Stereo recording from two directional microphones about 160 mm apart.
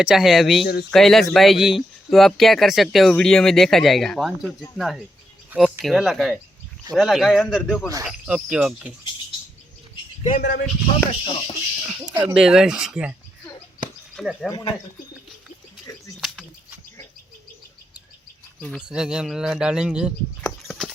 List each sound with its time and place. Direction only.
0.0 s speech: 5° right (ahead or behind)
0.6 s speech: 90° left
0.9 s speech: centre (ahead or behind)
10.2 s speech: 55° left (ahead or behind)
11.1 s speech: 35° left (ahead or behind)
11.9 s speech: 5° right (ahead or behind)
14.2 s speech: centre (ahead or behind)
15.9 s a sound: 20° left (ahead or behind)
16.2 s bird: centre (ahead or behind)
18.8 s speech: 5° right (ahead or behind)
20.4 s a sound: 5° left (ahead or behind)